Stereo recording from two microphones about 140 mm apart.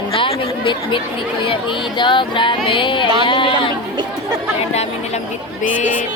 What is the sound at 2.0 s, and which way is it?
Music, 35° left (ahead or behind).